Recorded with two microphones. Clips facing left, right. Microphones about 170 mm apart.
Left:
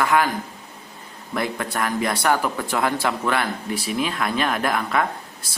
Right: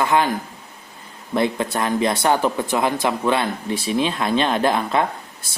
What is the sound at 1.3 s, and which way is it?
Speech, 25° right (ahead or behind).